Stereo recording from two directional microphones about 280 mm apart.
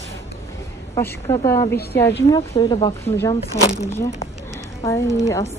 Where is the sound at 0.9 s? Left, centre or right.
Centre.